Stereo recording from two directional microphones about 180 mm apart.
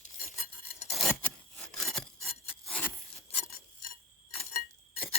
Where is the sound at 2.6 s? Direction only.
5° left (ahead or behind).